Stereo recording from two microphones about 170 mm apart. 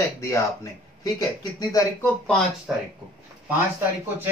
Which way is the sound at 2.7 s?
5° right (ahead or behind).